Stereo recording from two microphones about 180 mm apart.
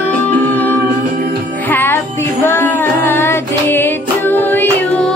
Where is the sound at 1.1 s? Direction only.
55° right (ahead or behind).